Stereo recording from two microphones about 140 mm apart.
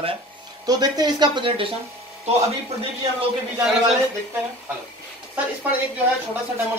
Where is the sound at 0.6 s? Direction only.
30° right (ahead or behind).